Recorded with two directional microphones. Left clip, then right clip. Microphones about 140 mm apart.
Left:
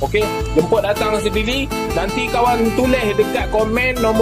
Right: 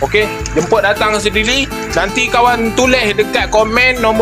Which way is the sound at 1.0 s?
30° right (ahead or behind).